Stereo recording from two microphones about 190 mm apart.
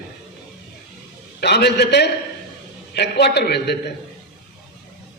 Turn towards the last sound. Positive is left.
turn(degrees=60)  # may be behind; listen again after turning